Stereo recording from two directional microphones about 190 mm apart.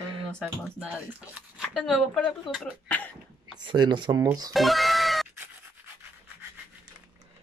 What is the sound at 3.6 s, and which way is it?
Speech, 25° right (ahead or behind).